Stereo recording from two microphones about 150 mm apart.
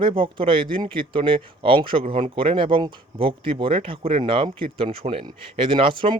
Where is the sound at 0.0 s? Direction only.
35° right (ahead or behind).